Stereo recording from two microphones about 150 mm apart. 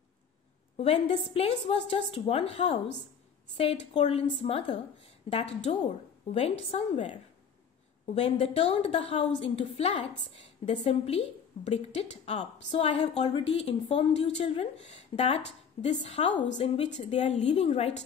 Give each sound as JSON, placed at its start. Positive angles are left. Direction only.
{"t": 0.7, "sound": "a woman's voice", "side_deg": 40}